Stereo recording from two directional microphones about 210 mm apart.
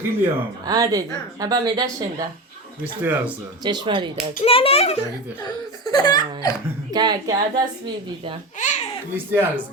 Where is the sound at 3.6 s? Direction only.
20° right (ahead or behind).